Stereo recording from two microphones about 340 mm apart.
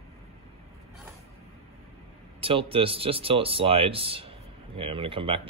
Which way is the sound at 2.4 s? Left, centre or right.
Centre.